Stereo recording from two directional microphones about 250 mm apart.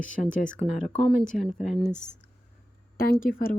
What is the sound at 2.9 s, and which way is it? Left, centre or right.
Speech, left.